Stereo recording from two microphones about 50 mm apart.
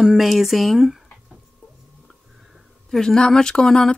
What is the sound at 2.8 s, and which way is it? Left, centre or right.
Speech, centre.